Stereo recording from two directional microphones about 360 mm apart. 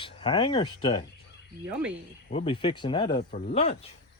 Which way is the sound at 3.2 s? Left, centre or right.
Left.